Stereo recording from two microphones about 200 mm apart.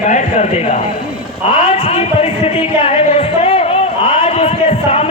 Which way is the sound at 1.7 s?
30° left (ahead or behind).